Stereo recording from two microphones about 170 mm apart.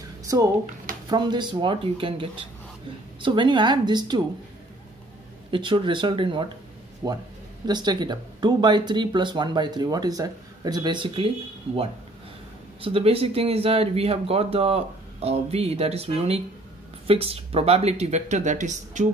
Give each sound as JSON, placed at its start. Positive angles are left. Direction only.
{"t": 0.2, "sound": "a sound", "side_deg": -20}
{"t": 1.0, "sound": "speech", "side_deg": -25}
{"t": 5.5, "sound": "speech", "side_deg": -30}